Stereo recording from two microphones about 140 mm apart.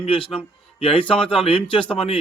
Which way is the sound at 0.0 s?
40° left (ahead or behind).